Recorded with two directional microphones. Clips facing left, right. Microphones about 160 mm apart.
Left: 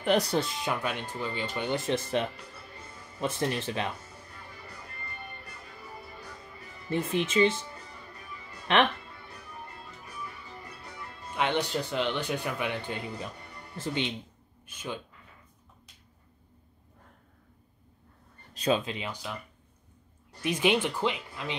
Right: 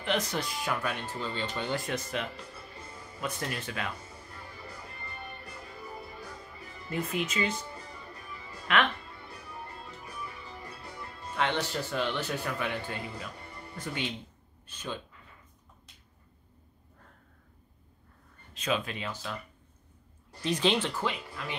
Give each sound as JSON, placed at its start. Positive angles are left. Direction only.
{"t": 0.0, "sound": "speech", "side_deg": 40}
{"t": 1.2, "sound": "speech", "side_deg": 10}
{"t": 1.7, "sound": "speech", "side_deg": 25}
{"t": 6.9, "sound": "speech", "side_deg": 30}
{"t": 8.7, "sound": "speech", "side_deg": 30}
{"t": 11.3, "sound": "speech", "side_deg": 15}
{"t": 14.7, "sound": "speech", "side_deg": 10}
{"t": 18.5, "sound": "a sound", "side_deg": 35}
{"t": 18.8, "sound": "speech", "side_deg": 20}
{"t": 20.4, "sound": "speech", "side_deg": 10}